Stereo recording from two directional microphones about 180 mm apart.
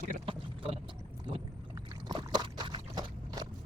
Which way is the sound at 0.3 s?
30° right (ahead or behind).